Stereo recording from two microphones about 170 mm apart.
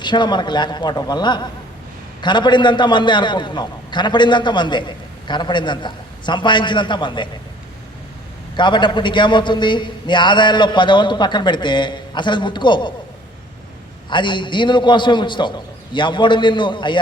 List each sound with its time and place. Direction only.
0.0 s a man's voice: 25° left (ahead or behind)
8.5 s a man's voice: 25° left (ahead or behind)
14.1 s a man's voice: 30° left (ahead or behind)